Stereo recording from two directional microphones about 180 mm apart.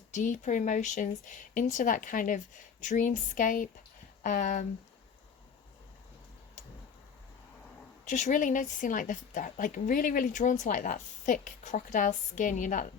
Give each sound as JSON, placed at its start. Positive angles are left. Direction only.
{"t": 0.1, "sound": "a woman's voice", "side_deg": 45}
{"t": 8.0, "sound": "a woman's voice", "side_deg": 45}